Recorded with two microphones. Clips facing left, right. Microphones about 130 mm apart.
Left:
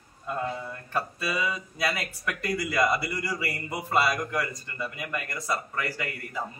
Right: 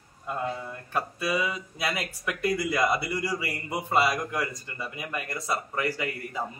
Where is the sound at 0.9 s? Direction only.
10° right (ahead or behind).